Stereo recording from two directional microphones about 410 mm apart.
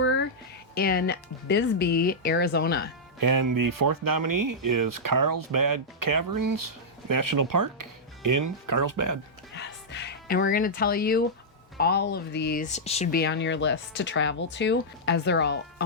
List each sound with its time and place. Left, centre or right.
0.0 s a sound: left
0.8 s speech: left
3.2 s speech: right
9.6 s speech: left